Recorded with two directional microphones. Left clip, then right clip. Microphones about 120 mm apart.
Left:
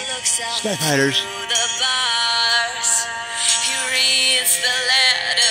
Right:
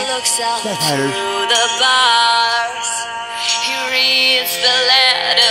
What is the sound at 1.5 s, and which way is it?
Music, 90° right.